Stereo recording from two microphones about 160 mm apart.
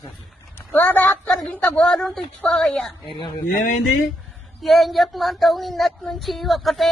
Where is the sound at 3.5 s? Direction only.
55° left (ahead or behind).